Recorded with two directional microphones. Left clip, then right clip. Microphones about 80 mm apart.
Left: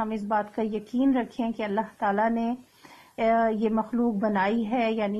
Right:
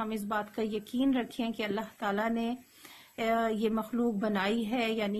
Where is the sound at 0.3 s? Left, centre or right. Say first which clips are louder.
Left 7 dB; centre.